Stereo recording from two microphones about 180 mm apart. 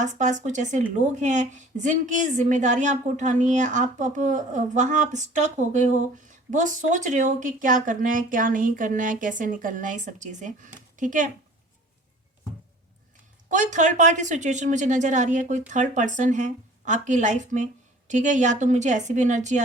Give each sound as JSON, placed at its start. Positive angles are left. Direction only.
{"t": 0.0, "sound": "a woman's voice", "side_deg": -45}
{"t": 13.5, "sound": "a woman's voice", "side_deg": -45}